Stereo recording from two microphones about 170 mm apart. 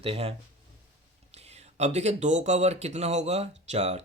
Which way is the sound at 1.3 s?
40° right (ahead or behind).